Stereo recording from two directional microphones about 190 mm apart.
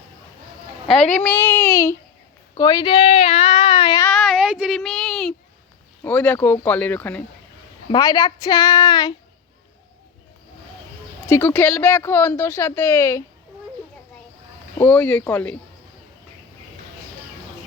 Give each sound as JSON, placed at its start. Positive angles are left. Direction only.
{"t": 1.0, "sound": "speech", "side_deg": 5}
{"t": 4.0, "sound": "child singing", "side_deg": 0}
{"t": 6.0, "sound": "speech", "side_deg": 10}
{"t": 7.9, "sound": "speech", "side_deg": 20}
{"t": 11.3, "sound": "speech", "side_deg": 10}
{"t": 14.8, "sound": "speech", "side_deg": 10}